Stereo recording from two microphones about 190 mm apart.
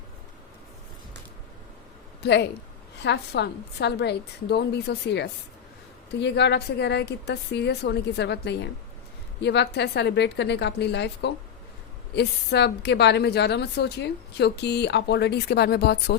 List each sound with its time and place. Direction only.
2.2 s a woman's voice: 60° left (ahead or behind)